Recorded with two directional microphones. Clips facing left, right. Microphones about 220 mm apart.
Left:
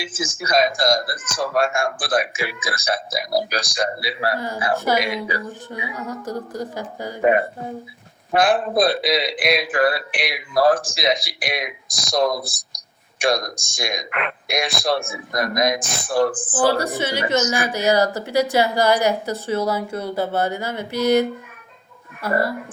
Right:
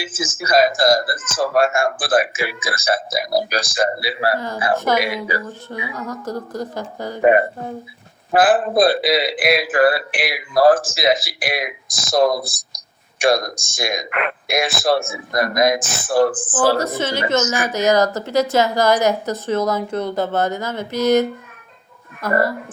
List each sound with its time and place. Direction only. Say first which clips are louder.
0.0 s a man's voice: right 1 dB; 5° right (ahead or behind)
4.4 s a woman's voice: right 1 dB; 10° left (ahead or behind)
4.9 s a man's voice: right 2 dB; 5° right (ahead or behind)
5.7 s a woman's voice: right 2 dB; 10° left (ahead or behind)
8.3 s a man's voice: right 3 dB; 5° right (ahead or behind)
16.7 s a woman's voice: right 2 dB; 15° left (ahead or behind)